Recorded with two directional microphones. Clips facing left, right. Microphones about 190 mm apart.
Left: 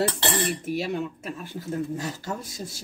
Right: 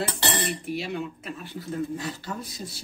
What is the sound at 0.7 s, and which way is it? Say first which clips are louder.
Speech: left 3 dB; 45° left (ahead or behind).